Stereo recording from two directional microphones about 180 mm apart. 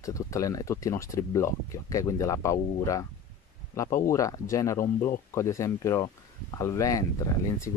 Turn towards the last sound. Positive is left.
turn(degrees=20)  # may be behind; listen again after turning